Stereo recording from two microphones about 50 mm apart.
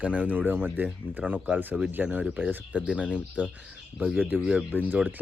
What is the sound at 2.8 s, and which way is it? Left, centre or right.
Speech, right.